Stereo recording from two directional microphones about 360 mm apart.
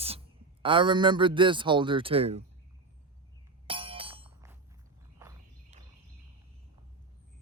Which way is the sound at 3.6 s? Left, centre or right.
Centre.